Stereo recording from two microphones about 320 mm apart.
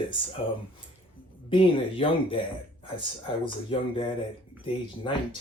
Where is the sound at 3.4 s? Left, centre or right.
Centre.